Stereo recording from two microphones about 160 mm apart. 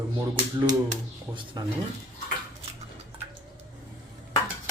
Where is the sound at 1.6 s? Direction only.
25° right (ahead or behind).